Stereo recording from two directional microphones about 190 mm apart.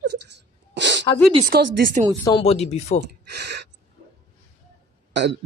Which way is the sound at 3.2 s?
60° right (ahead or behind).